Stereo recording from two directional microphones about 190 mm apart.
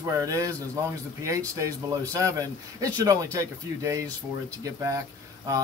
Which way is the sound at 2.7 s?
20° right (ahead or behind).